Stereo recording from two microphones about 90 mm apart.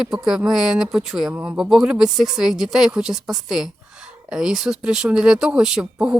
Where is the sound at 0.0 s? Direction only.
5° right (ahead or behind).